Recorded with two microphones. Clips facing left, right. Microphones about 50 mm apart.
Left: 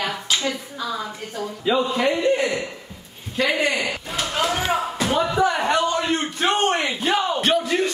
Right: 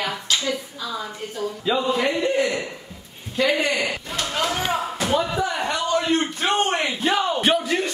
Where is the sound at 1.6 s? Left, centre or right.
Centre.